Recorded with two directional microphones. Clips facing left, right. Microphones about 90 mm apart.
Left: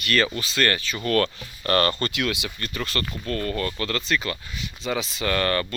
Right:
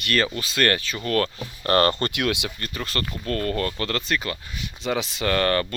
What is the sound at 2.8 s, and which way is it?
Speech, 40° right (ahead or behind).